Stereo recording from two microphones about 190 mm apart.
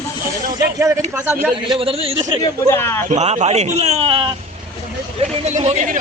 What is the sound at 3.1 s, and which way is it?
A man's voice, 35° right (ahead or behind).